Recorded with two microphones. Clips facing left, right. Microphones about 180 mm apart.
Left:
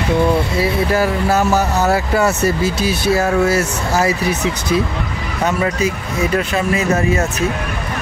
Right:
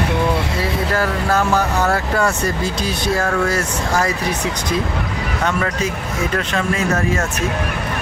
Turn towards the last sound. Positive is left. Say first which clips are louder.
# left 3 dB
turn(degrees=5)  # may be behind; listen again after turning